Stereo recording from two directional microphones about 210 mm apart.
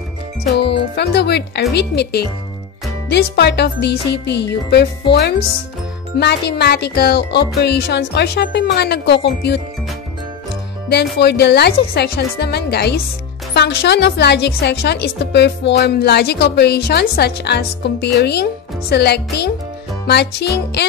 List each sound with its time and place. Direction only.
0.4 s a woman's voice: 50° left (ahead or behind)
6.1 s a woman's voice: 55° left (ahead or behind)
10.9 s a woman's voice: 50° left (ahead or behind)